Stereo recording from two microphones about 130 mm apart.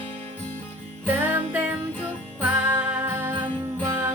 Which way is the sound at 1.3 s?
15° right (ahead or behind).